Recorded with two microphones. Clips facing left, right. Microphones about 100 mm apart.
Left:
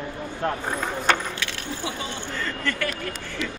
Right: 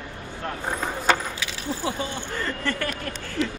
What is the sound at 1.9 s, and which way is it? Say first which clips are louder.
Speech: right 3 dB; 35° right (ahead or behind).